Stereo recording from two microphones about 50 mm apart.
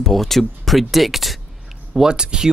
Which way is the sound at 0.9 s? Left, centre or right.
Centre.